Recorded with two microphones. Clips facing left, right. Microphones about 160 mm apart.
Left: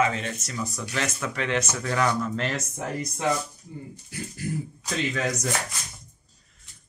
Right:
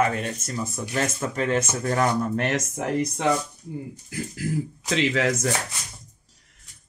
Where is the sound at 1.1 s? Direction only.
35° right (ahead or behind).